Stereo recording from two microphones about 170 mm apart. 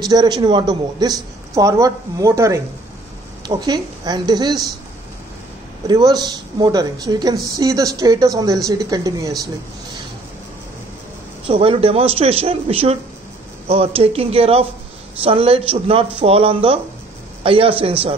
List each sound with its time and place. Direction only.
0.0 s a woman's voice: 25° right (ahead or behind)
5.9 s a woman's voice: 25° right (ahead or behind)
11.4 s speech: 30° right (ahead or behind)